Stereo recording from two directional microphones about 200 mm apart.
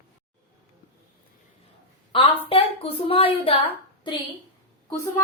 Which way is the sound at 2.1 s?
25° left (ahead or behind).